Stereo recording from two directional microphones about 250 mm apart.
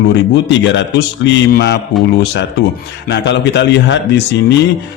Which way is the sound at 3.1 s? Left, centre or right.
Left.